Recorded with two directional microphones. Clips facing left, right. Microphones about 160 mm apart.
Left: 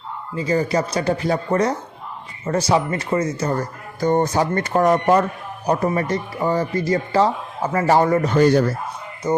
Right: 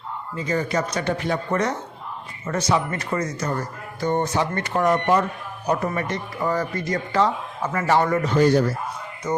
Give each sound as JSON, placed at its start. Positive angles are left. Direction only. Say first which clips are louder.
{"t": 0.3, "sound": "speech", "louder": "left 4 dB", "side_deg": 35}
{"t": 3.6, "sound": "speech", "louder": "left 4 dB", "side_deg": 40}
{"t": 8.3, "sound": "speech", "louder": "left 1 dB", "side_deg": 65}
{"t": 9.2, "sound": "speech", "louder": "left 5 dB", "side_deg": 30}